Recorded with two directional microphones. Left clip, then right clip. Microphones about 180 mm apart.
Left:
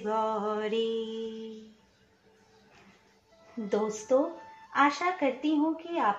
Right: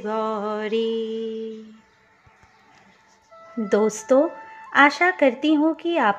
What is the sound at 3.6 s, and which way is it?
Speech, 45° right (ahead or behind).